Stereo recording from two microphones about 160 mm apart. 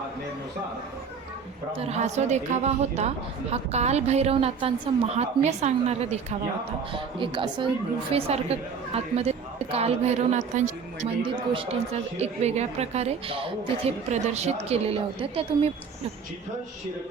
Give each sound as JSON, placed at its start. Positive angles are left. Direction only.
{"t": 1.7, "sound": "a woman's voice", "side_deg": -40}
{"t": 7.2, "sound": "speech", "side_deg": -30}